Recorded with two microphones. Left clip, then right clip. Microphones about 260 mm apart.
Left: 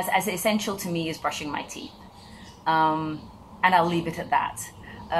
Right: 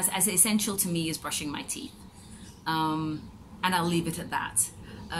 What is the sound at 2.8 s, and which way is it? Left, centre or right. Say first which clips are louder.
Speech: left 6 dB; left.